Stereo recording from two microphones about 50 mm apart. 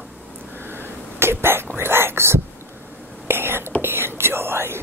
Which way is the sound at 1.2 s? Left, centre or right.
Right.